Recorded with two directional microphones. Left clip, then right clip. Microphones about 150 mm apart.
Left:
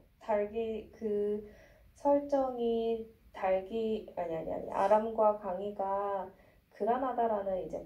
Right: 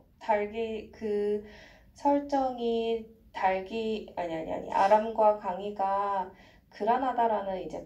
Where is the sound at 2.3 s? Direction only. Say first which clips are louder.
Right 2 dB; 15° left (ahead or behind).